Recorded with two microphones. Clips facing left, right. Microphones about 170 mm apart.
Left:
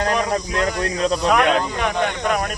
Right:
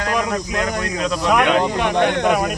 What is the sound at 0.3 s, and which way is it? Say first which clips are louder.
Speech: left 1 dB; 35° left (ahead or behind).